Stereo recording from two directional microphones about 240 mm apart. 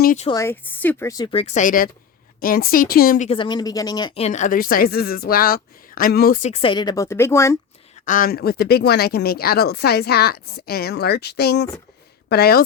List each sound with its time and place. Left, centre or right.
0.0 s a sound: left
0.3 s speech: centre; by 3.2 s left
3.2 s speech: centre
8.0 s speech: left